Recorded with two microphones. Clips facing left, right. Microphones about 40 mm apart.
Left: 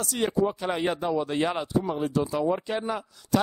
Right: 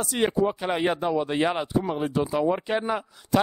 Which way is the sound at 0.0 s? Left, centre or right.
Right.